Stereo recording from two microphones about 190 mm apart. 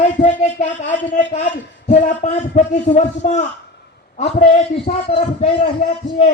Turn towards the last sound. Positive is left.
turn(degrees=35)  # may be behind; listen again after turning